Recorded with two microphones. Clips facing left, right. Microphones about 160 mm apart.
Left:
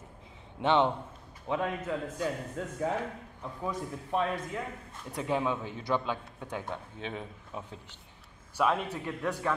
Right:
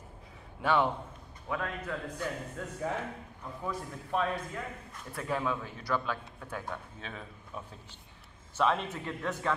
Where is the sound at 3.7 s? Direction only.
20° left (ahead or behind).